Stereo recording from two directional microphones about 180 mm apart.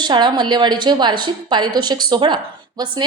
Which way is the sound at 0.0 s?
25° right (ahead or behind).